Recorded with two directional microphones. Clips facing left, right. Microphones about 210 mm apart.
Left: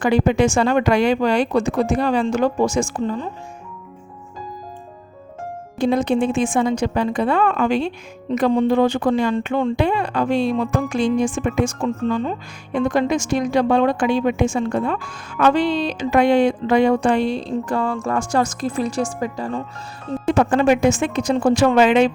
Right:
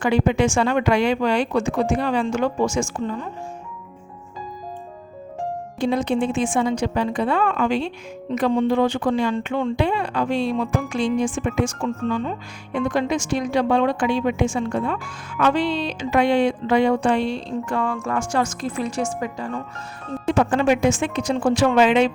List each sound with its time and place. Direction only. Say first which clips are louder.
0.0 s speech: left 2 dB; 40° left (ahead or behind)
5.8 s speech: left 3 dB; 45° left (ahead or behind)